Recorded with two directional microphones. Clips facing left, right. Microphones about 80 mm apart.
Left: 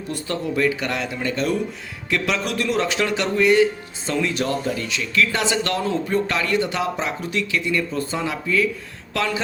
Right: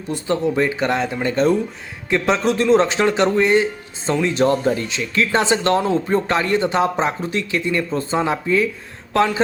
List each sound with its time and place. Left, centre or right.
0.1 s a man's voice: right